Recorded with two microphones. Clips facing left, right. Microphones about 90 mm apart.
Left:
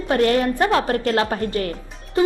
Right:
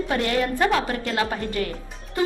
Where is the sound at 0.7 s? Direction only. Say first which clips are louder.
Left 5 dB; 45° left (ahead or behind).